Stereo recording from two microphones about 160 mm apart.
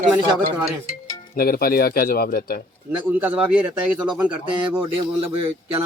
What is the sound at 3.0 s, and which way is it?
Speech, 10° right (ahead or behind).